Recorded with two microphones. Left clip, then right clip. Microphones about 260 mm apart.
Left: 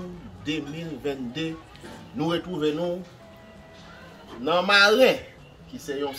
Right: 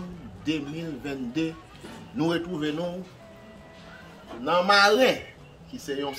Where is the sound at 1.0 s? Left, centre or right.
Centre.